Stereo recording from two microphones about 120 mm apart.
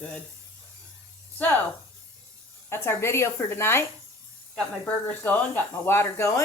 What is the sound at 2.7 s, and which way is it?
Speech, 20° left (ahead or behind).